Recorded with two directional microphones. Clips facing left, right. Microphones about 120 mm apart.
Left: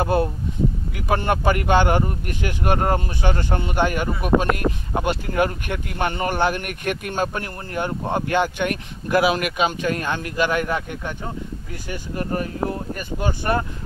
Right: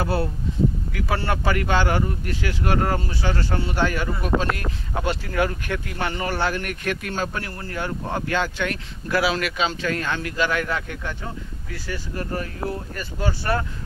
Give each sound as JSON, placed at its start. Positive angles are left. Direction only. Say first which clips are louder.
{"t": 0.0, "sound": "speech", "louder": "left 4 dB", "side_deg": 20}